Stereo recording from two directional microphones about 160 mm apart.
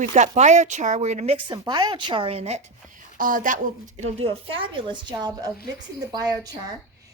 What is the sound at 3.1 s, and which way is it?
Speech, 60° right (ahead or behind).